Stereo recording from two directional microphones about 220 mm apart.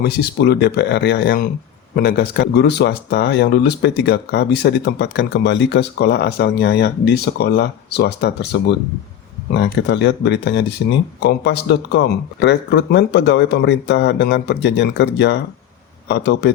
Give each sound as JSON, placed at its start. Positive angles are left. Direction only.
{"t": 0.0, "sound": "speech", "side_deg": 45}